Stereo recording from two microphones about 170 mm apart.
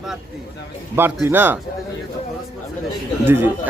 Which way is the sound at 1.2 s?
10° right (ahead or behind).